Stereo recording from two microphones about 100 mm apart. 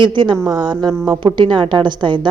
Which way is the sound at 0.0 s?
50° right (ahead or behind).